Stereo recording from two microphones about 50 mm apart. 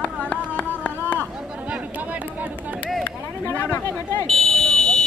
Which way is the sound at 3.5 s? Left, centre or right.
Left.